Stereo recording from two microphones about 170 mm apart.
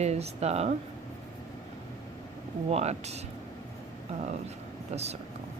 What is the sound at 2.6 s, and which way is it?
Speech, 40° right (ahead or behind).